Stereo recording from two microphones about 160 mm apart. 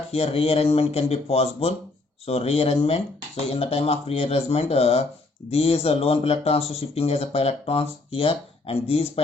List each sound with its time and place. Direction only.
0.1 s speech: 40° left (ahead or behind)